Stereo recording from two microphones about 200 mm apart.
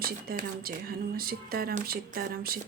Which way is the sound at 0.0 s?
50° right (ahead or behind).